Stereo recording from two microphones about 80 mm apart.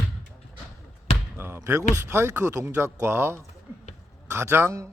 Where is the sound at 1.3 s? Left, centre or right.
Right.